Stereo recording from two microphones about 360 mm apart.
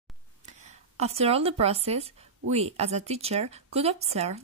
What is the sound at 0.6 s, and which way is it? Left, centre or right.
Speech, centre.